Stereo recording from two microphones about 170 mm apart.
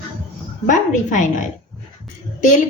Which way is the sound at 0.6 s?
45° left (ahead or behind).